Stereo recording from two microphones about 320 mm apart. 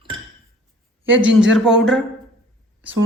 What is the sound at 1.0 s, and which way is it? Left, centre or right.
Speech, centre.